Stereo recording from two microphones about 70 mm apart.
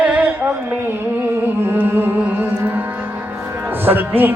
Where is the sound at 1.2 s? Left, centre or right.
Right.